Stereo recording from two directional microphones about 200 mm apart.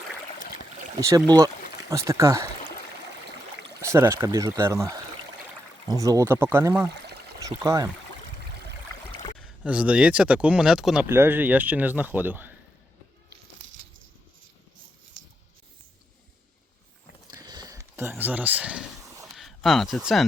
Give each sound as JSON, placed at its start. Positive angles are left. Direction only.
{"t": 0.9, "sound": "speech", "side_deg": -20}
{"t": 3.8, "sound": "speech", "side_deg": -15}
{"t": 9.4, "sound": "speech", "side_deg": -5}
{"t": 17.2, "sound": "a sound", "side_deg": -20}